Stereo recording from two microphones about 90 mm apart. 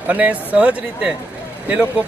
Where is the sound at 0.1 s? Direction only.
15° right (ahead or behind).